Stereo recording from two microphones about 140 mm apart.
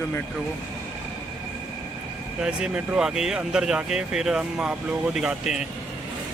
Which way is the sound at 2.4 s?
5° right (ahead or behind).